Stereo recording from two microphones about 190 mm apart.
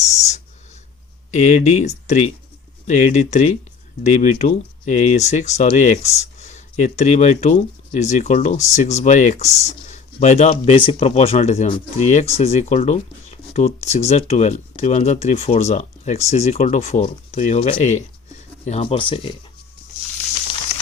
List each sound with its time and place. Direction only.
1.3 s speech: 35° left (ahead or behind)